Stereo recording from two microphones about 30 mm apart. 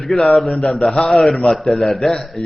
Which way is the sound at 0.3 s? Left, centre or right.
Centre.